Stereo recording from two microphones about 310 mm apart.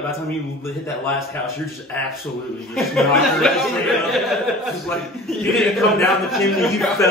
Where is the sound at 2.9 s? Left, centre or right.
Centre.